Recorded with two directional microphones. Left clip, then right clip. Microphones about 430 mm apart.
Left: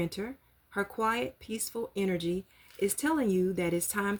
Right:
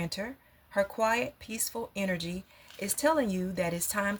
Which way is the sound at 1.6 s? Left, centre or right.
Centre.